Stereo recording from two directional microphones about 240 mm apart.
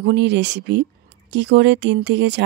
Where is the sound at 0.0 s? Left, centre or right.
Right.